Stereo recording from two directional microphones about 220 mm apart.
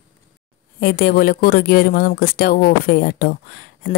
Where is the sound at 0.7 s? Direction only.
45° left (ahead or behind).